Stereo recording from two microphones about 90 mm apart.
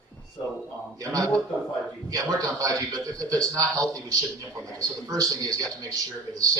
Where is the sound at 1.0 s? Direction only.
40° right (ahead or behind).